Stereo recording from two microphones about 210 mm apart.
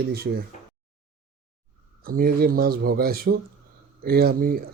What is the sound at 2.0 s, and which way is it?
Speech, 45° right (ahead or behind).